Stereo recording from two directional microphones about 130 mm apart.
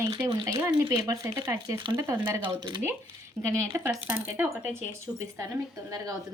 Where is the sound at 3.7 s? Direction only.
15° right (ahead or behind).